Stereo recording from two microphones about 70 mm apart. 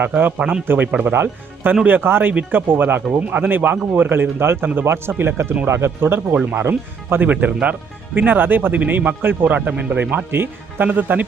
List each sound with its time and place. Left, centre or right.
0.0 s speech: right
6.3 s speech: centre
6.6 s speech: right